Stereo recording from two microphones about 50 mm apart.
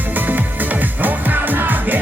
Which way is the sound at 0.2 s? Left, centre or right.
Right.